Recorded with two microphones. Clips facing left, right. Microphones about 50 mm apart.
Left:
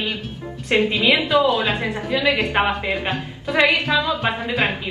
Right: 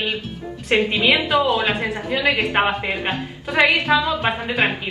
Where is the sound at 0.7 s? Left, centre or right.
Right.